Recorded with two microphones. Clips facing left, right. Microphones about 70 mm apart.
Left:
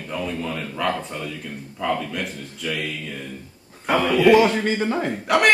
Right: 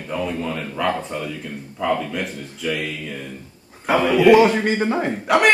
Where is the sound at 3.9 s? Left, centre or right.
Centre.